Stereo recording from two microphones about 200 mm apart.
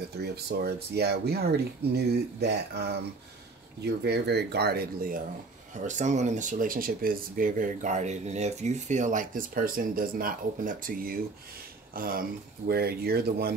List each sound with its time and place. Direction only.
0.2 s speech: 55° right (ahead or behind)
5.9 s speech: 35° right (ahead or behind)